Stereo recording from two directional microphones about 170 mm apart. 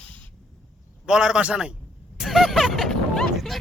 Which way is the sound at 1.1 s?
5° right (ahead or behind).